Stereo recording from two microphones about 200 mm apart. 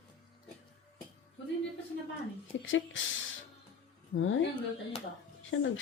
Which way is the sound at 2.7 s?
70° left (ahead or behind).